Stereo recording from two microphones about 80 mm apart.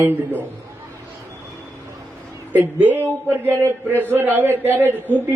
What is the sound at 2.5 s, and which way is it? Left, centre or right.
Speech, right.